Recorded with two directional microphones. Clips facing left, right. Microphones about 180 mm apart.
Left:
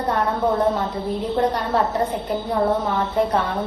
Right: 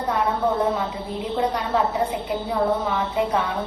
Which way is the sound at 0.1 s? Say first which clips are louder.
Left 1 dB; 10° right (ahead or behind).